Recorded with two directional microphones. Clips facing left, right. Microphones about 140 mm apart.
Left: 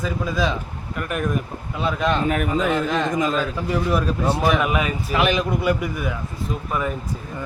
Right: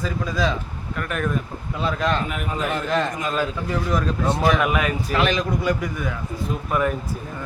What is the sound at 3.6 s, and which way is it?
Speech, 10° left (ahead or behind).